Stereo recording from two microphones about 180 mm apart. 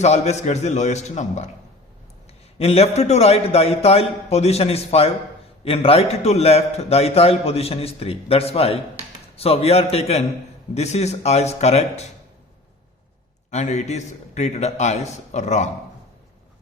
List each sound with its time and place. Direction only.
0.0 s a man's voice: 40° left (ahead or behind)
2.6 s a man's voice: 35° left (ahead or behind)
13.5 s a man's voice: 40° left (ahead or behind)